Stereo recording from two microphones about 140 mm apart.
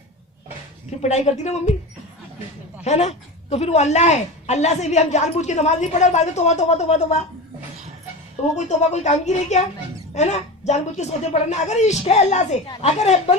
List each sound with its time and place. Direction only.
0.9 s speech: 55° left (ahead or behind)
2.8 s speech: 55° left (ahead or behind)
8.5 s a woman's voice: 55° left (ahead or behind)